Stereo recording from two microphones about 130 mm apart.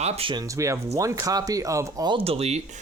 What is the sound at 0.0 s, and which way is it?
Speech, 45° right (ahead or behind).